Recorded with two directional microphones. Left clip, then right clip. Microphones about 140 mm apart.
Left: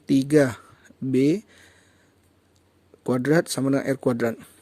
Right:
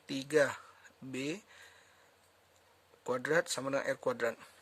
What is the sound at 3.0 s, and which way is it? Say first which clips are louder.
Speech: left 10 dB; 35° left (ahead or behind).